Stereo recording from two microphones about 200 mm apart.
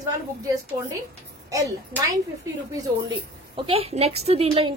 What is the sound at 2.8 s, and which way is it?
A woman's voice, 25° right (ahead or behind).